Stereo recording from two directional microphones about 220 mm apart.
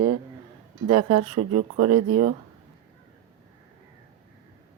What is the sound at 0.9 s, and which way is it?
Speech, 25° right (ahead or behind).